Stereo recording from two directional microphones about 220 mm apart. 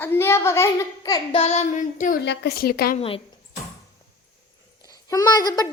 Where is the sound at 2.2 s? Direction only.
50° left (ahead or behind).